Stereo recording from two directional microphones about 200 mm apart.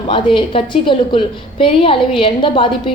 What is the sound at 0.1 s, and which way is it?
A woman's voice, 25° left (ahead or behind).